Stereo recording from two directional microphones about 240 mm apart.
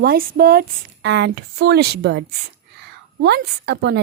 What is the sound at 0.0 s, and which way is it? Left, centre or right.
A woman's voice, right.